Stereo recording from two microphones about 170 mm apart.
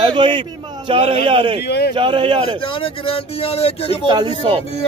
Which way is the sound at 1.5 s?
70° left (ahead or behind).